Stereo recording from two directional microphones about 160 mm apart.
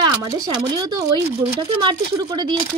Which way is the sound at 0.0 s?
25° right (ahead or behind).